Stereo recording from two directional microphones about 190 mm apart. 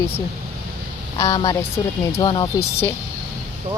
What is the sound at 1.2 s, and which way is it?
Speech, 20° left (ahead or behind).